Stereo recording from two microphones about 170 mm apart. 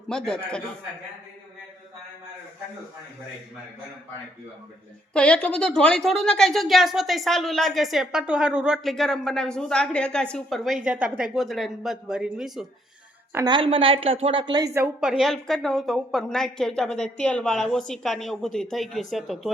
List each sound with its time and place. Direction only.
0.1 s a woman's voice: 5° left (ahead or behind)
5.1 s a woman's voice: 5° left (ahead or behind)
13.3 s speech: 25° right (ahead or behind)
15.0 s a woman's voice: centre (ahead or behind)